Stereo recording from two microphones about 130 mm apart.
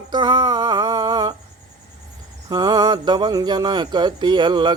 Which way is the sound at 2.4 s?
30° right (ahead or behind).